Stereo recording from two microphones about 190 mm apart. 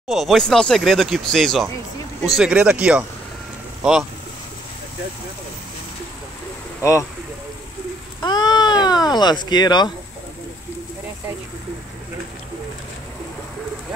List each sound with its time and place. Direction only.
0.1 s speech: centre (ahead or behind)
6.8 s speech: 15° left (ahead or behind)
8.2 s a sound: 20° left (ahead or behind)